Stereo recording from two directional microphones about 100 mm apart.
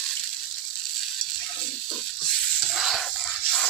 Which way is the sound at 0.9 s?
5° left (ahead or behind).